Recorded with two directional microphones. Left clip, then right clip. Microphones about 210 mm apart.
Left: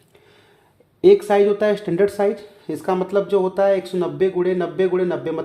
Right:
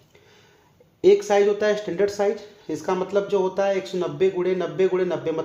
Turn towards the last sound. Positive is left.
turn(degrees=30)  # may be behind; listen again after turning